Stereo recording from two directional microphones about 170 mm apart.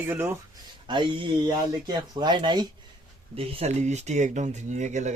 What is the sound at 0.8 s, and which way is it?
Speech, 25° right (ahead or behind).